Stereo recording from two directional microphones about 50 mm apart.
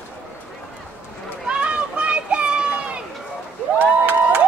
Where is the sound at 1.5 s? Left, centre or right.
Right.